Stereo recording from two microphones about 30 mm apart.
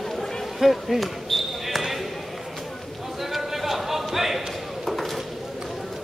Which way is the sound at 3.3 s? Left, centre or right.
Centre.